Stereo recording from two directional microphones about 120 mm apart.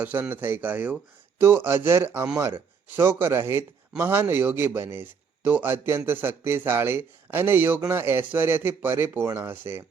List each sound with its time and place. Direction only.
0.0 s speech: 15° right (ahead or behind)